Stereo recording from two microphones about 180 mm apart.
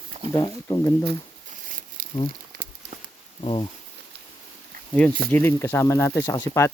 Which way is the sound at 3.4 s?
25° left (ahead or behind).